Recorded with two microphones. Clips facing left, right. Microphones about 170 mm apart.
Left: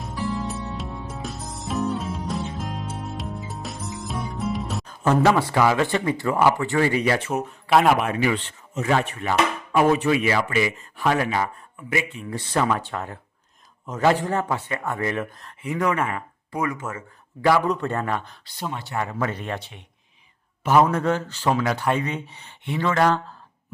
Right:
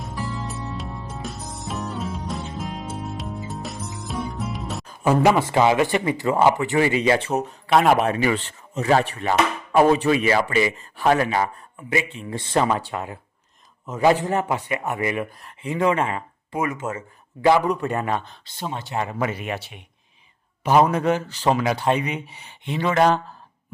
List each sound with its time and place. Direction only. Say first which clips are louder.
0.0 s music: left 3 dB; centre (ahead or behind)
5.2 s speech: right 2 dB; 15° right (ahead or behind); by 7.5 s 35° right (ahead or behind)
7.7 s speech: right 1 dB; centre (ahead or behind)
7.9 s a man's voice: right 2 dB; 35° right (ahead or behind); by 15.5 s 10° right (ahead or behind)
15.6 s speech: right 2 dB; 25° right (ahead or behind)
19.3 s a man's voice: right 1 dB; 5° right (ahead or behind)
20.9 s a man's voice: right 2 dB; 15° right (ahead or behind)